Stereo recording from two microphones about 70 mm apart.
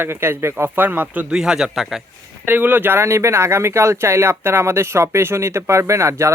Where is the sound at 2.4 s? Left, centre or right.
Right.